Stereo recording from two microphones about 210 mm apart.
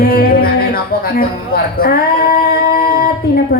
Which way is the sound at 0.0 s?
45° left (ahead or behind).